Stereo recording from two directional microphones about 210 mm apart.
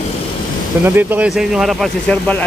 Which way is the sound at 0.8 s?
10° right (ahead or behind).